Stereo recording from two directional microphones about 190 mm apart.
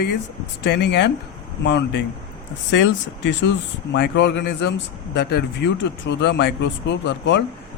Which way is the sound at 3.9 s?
65° left (ahead or behind).